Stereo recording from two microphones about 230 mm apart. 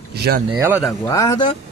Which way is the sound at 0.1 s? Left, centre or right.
Right.